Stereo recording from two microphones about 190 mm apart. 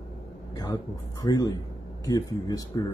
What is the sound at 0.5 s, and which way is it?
Speech, 20° left (ahead or behind).